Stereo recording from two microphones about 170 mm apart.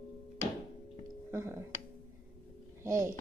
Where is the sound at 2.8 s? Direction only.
20° right (ahead or behind).